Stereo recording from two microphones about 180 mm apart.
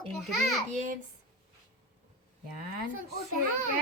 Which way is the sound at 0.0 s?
5° left (ahead or behind).